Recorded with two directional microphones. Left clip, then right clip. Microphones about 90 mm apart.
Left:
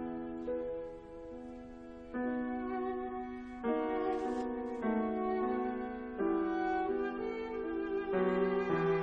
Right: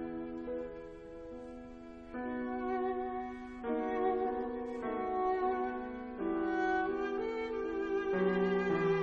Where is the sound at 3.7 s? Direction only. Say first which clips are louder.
Left 1 dB; 30° left (ahead or behind).